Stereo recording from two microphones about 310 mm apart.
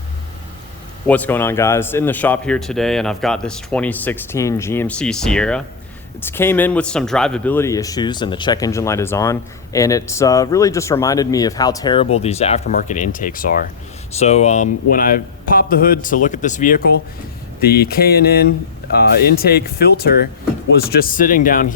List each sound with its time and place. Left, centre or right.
1.0 s a man's voice: centre; by 21.7 s left